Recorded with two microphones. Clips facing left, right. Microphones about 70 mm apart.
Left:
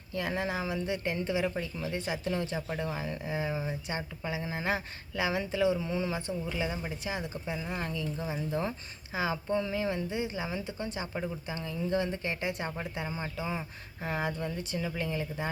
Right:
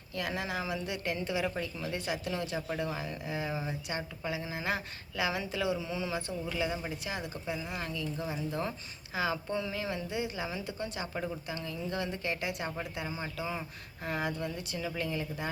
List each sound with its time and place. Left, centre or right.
0.1 s speech: left
13.3 s speech: centre